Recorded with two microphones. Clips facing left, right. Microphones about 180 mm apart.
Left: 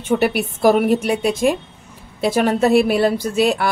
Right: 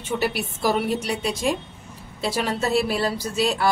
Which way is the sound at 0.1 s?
60° left (ahead or behind).